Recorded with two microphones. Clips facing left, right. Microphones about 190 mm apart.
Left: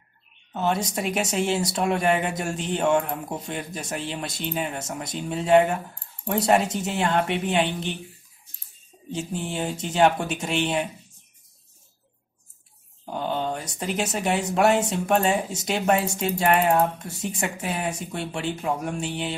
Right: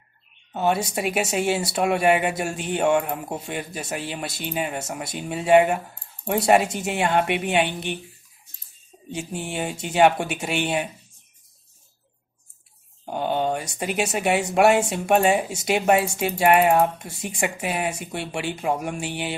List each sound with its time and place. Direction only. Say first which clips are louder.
0.6 s speech: right 2 dB; 10° right (ahead or behind)
9.1 s speech: even; 10° right (ahead or behind)
13.0 s speech: right 3 dB; 15° right (ahead or behind)